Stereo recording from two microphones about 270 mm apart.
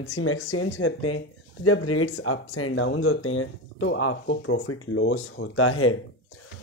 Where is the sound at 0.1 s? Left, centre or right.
Left.